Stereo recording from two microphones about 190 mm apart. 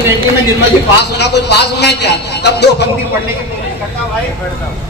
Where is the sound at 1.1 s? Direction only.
60° left (ahead or behind).